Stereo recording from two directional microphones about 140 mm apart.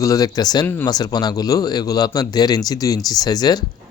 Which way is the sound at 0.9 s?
30° left (ahead or behind).